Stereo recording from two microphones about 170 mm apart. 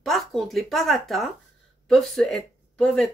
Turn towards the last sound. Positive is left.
turn(degrees=5)  # may be behind; listen again after turning